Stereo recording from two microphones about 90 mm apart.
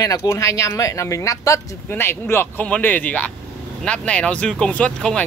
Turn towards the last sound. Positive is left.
turn(degrees=10)  # may be behind; listen again after turning